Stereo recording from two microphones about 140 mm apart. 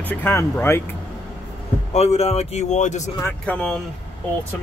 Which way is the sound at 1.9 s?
50° left (ahead or behind).